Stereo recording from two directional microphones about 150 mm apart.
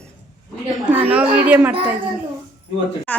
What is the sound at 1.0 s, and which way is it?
Speech, 10° right (ahead or behind).